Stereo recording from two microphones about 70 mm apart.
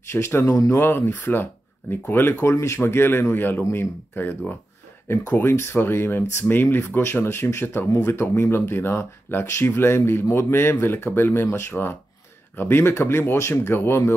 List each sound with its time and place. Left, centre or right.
0.1 s speech: left
2.8 s speech: left